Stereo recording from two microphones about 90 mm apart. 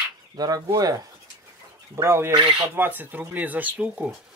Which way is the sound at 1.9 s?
30° right (ahead or behind).